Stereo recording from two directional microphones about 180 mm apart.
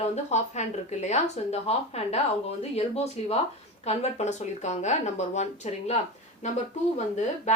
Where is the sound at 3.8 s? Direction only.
40° left (ahead or behind).